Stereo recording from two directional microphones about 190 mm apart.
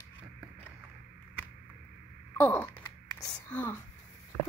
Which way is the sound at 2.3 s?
10° left (ahead or behind).